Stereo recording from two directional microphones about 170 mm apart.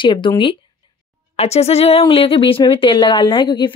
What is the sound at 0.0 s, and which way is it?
Speech, 30° left (ahead or behind).